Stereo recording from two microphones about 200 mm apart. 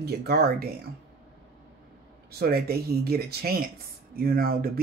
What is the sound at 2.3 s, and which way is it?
Speech, 50° right (ahead or behind).